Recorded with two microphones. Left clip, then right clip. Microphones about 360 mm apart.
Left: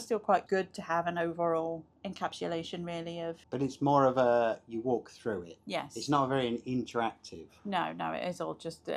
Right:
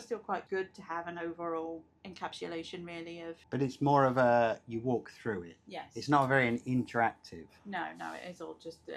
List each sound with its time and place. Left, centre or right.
0.1 s speech: left
3.5 s speech: centre
6.4 s speech: right
7.7 s speech: left